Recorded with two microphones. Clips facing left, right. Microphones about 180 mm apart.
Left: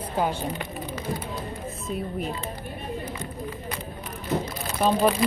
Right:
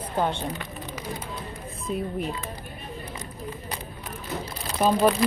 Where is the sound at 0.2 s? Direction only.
5° left (ahead or behind).